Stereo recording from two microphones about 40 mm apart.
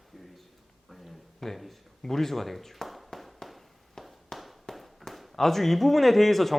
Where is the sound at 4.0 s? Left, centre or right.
Centre.